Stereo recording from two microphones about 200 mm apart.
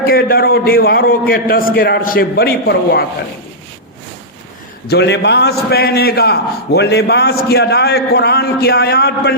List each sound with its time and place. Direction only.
0.0 s a man's voice: 50° left (ahead or behind)
4.9 s a man's voice: 55° left (ahead or behind)